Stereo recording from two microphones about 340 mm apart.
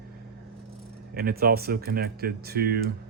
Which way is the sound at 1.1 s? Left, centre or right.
Right.